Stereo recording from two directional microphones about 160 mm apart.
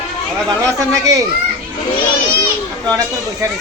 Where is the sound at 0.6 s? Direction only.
20° right (ahead or behind).